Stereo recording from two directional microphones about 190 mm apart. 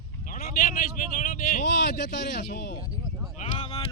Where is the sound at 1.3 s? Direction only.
40° left (ahead or behind).